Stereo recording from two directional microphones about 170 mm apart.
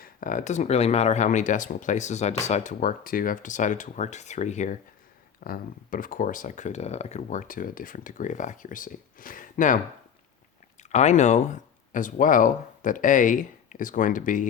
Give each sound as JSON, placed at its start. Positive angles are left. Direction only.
{"t": 0.0, "sound": "speech", "side_deg": 50}
{"t": 5.4, "sound": "speech", "side_deg": 55}
{"t": 10.9, "sound": "speech", "side_deg": 45}